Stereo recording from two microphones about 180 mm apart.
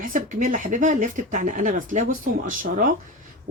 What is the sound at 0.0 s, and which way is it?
Speech, 45° right (ahead or behind).